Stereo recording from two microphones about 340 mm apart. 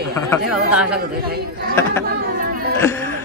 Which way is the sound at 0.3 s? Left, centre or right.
Centre.